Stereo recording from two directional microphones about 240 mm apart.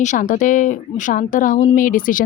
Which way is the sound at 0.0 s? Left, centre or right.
Left.